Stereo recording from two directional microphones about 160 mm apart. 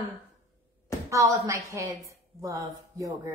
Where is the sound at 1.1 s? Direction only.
20° right (ahead or behind).